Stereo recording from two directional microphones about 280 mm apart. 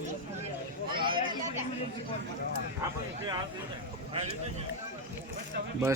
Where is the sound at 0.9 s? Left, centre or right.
Centre.